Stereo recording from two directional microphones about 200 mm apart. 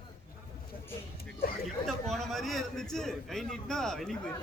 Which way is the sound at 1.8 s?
Centre (ahead or behind).